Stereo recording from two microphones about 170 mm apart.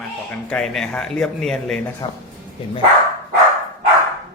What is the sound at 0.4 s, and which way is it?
Speech, 5° left (ahead or behind).